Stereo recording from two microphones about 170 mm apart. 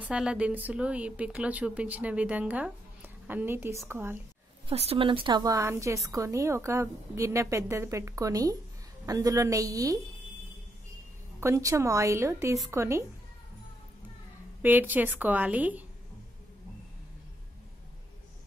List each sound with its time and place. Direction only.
0.0 s a woman's voice: 5° right (ahead or behind)
4.6 s a woman's voice: 35° right (ahead or behind); by 9.9 s 20° right (ahead or behind)
11.3 s a woman's voice: 15° right (ahead or behind)
14.6 s a woman's voice: 10° right (ahead or behind)